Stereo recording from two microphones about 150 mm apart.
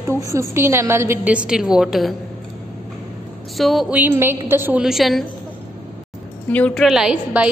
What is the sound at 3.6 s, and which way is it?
A woman's voice, centre (ahead or behind).